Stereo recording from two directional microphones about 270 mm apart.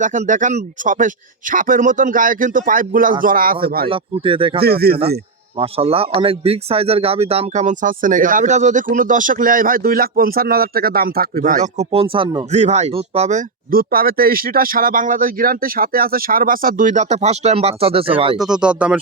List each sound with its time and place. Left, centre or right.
0.0 s speech: right
3.8 s speech: centre
4.6 s speech: right
5.5 s speech: right
18.3 s speech: centre